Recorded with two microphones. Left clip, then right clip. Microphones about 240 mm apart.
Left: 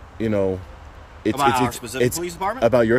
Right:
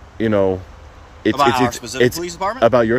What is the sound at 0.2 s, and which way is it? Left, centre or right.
Speech, centre.